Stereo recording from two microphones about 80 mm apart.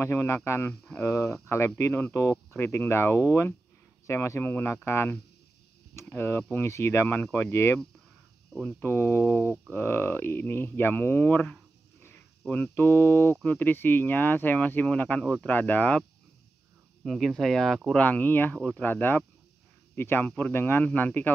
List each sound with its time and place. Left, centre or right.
0.0 s speech: left
2.5 s speech: left
8.8 s speech: left
12.4 s speech: centre
12.7 s speech: left
17.0 s speech: centre
17.9 s speech: centre
18.6 s speech: centre
18.9 s speech: left
20.2 s speech: centre